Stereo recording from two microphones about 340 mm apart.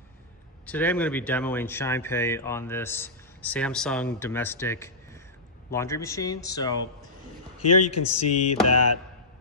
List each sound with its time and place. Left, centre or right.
0.7 s speech: centre
7.6 s speech: left